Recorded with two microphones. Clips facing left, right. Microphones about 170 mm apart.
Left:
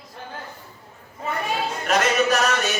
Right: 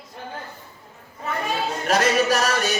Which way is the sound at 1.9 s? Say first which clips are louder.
Even; 35° right (ahead or behind).